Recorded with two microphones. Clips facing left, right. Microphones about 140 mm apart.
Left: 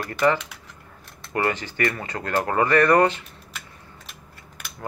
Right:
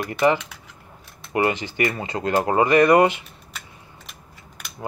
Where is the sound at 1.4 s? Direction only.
20° right (ahead or behind).